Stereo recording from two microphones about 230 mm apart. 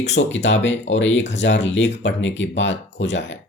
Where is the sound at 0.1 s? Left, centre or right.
Left.